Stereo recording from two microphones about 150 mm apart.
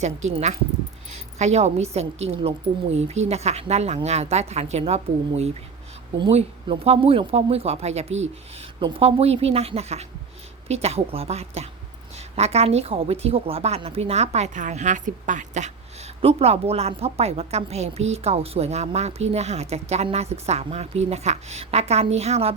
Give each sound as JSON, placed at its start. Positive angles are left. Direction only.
{"t": 0.0, "sound": "a woman's voice", "side_deg": -50}